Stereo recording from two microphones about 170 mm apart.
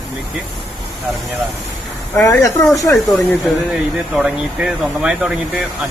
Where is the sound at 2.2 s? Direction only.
15° left (ahead or behind).